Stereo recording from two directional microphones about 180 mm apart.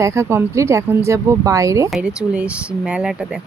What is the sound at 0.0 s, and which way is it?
Speech, 15° right (ahead or behind).